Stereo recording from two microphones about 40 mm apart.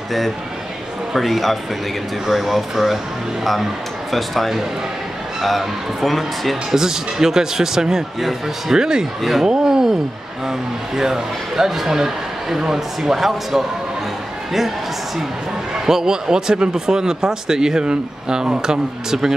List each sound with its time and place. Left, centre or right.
1.1 s speech: centre
4.1 s speech: centre
6.7 s speech: centre
8.7 s speech: centre
9.4 s a sound: centre
11.0 s speech: centre
15.7 s speech: centre